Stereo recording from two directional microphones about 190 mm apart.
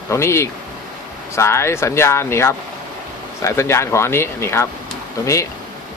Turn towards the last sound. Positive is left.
turn(degrees=15)  # may be behind; listen again after turning